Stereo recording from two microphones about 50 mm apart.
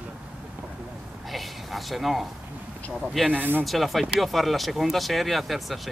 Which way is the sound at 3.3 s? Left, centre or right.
Right.